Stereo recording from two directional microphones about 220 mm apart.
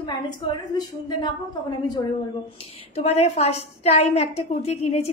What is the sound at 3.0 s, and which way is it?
A woman's voice, 30° left (ahead or behind).